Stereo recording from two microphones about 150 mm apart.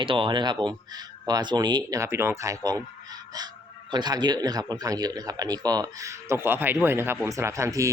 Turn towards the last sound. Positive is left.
turn(degrees=-20)  # may be behind; listen again after turning